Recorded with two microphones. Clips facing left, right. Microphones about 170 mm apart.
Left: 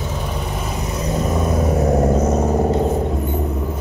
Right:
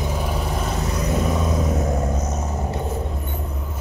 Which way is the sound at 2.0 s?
60° left (ahead or behind).